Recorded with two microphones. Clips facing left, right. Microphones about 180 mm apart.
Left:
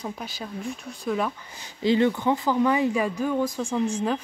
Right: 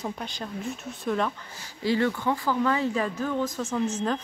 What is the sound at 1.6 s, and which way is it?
Speech, 20° left (ahead or behind).